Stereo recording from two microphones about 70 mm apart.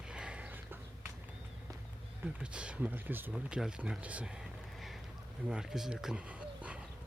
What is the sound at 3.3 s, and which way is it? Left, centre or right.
Speech, centre.